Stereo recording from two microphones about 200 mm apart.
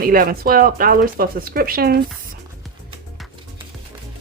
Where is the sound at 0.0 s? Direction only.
45° right (ahead or behind).